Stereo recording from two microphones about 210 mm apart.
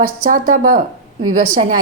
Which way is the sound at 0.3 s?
40° right (ahead or behind).